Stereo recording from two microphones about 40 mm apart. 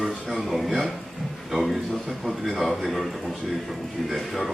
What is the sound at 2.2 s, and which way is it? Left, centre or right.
Speech, centre.